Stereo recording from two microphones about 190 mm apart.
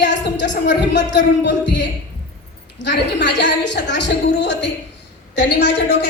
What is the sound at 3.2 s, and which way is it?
Speech, 65° left (ahead or behind).